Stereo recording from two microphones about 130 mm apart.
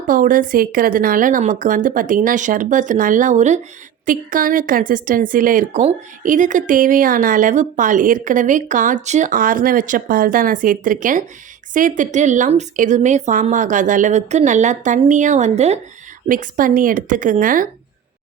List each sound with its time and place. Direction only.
0.1 s speech: 90° right; by 3.6 s 65° right (ahead or behind)
4.0 s a woman's voice: 90° right; by 15.8 s 60° right (ahead or behind)
16.3 s speech: 90° right